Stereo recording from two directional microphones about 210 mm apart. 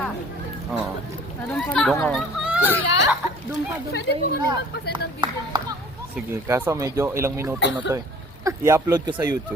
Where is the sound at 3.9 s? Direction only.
50° left (ahead or behind).